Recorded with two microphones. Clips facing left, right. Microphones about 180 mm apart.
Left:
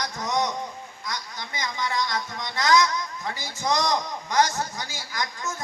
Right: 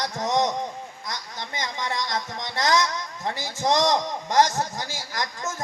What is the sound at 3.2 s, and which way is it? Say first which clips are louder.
Speech: right 3 dB; 90° right.